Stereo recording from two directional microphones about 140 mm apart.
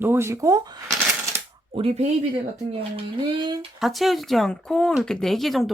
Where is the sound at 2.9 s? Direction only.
35° right (ahead or behind).